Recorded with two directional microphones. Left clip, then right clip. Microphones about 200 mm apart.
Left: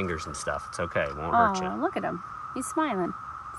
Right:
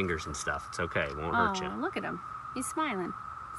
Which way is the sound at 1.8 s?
50° left (ahead or behind).